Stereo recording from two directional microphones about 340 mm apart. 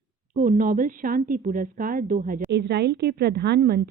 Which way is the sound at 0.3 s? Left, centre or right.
Right.